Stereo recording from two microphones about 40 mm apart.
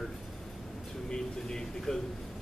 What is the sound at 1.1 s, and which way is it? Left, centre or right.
Speech, centre.